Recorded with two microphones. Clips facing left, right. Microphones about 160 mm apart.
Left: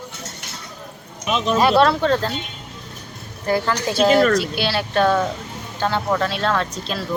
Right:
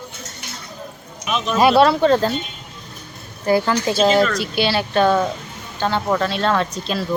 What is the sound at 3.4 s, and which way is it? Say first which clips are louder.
Speech: right 3 dB; 5° right (ahead or behind).